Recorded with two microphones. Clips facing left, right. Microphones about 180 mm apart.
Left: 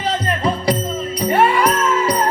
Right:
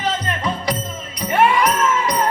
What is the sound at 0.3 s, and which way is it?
Music, 30° left (ahead or behind).